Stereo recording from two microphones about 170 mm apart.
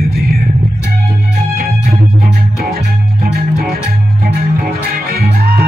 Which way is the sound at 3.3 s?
65° right (ahead or behind).